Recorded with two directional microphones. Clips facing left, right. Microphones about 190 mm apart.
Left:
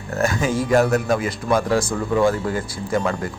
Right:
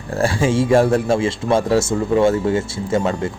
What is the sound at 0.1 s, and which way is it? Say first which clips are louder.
Speech: right 3 dB; 30° right (ahead or behind).